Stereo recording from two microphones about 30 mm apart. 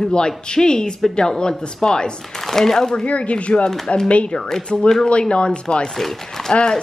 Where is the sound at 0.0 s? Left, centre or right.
Left.